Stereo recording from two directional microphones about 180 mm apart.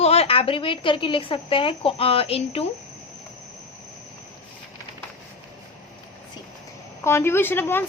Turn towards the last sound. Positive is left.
turn(degrees=10)  # may be behind; listen again after turning